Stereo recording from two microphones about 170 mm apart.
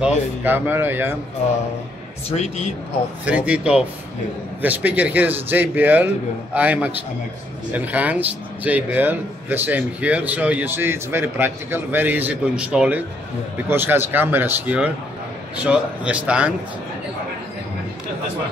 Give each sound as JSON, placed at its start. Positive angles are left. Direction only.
{"t": 0.0, "sound": "speech", "side_deg": -10}
{"t": 2.2, "sound": "a man's voice", "side_deg": 40}
{"t": 3.3, "sound": "speech", "side_deg": -5}